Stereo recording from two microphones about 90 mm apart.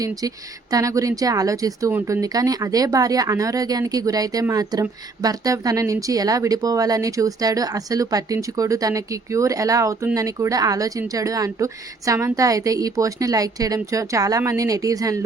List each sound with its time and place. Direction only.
0.2 s a woman's voice: 40° right (ahead or behind)